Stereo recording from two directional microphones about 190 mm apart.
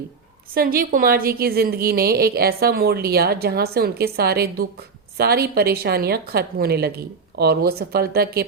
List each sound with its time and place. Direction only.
0.5 s a woman's voice: 50° right (ahead or behind)